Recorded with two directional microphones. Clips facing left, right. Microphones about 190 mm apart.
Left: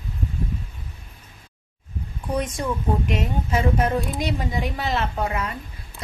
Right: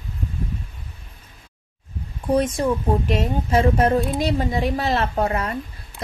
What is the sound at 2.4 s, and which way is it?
Speech, 30° right (ahead or behind).